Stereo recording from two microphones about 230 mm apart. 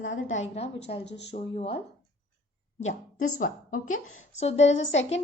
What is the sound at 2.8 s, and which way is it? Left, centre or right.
A woman's voice, left.